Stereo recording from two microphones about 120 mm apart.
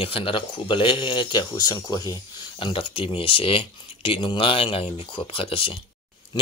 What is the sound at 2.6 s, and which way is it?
Speech, 45° left (ahead or behind).